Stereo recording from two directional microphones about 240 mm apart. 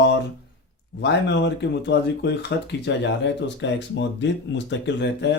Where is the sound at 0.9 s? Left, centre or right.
Left.